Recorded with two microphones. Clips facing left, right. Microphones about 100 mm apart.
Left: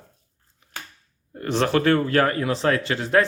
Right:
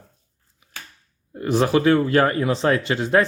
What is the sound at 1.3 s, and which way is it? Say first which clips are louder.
Speech: right 3 dB; 10° right (ahead or behind).